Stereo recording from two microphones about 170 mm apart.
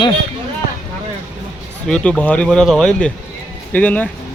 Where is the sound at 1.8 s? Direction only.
5° left (ahead or behind).